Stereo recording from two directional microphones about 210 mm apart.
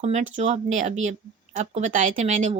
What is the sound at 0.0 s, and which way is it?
Speech, 35° right (ahead or behind).